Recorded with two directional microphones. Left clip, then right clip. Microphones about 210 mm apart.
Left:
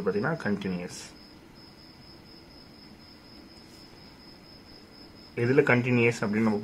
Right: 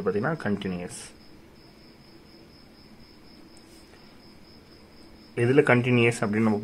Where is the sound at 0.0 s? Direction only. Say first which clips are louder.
Right 1 dB; 10° right (ahead or behind).